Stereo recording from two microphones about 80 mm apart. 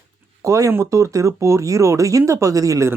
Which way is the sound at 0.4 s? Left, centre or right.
Right.